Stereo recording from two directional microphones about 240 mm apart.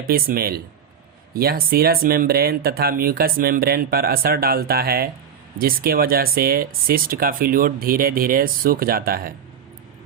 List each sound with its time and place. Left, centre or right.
0.0 s speech: right